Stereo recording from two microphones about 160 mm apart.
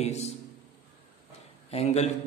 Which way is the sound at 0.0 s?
40° left (ahead or behind).